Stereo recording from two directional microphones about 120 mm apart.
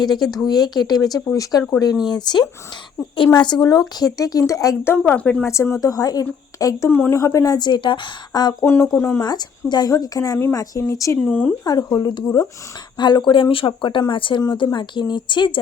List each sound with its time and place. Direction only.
0.0 s speech: 35° left (ahead or behind)
5.0 s speech: 10° left (ahead or behind)
5.5 s speech: 25° left (ahead or behind)
8.6 s speech: 20° left (ahead or behind)
9.2 s speech: 35° left (ahead or behind)
11.3 s speech: 15° left (ahead or behind)
11.6 s speech: 30° left (ahead or behind)